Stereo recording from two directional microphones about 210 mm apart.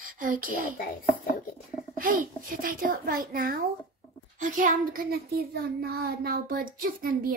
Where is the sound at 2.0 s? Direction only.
40° right (ahead or behind).